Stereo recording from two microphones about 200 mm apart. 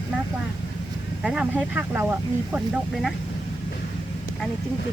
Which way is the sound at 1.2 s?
5° right (ahead or behind).